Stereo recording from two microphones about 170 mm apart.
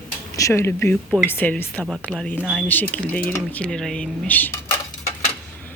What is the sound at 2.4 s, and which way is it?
Dishes, centre (ahead or behind).